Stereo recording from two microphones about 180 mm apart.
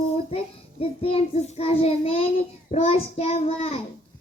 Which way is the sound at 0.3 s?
35° left (ahead or behind).